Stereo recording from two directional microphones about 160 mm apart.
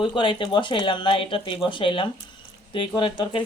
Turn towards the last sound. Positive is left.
turn(degrees=30)  # may be behind; listen again after turning